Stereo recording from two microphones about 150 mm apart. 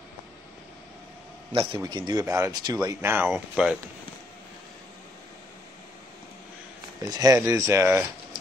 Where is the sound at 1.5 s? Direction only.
35° right (ahead or behind); by 3.7 s 5° right (ahead or behind).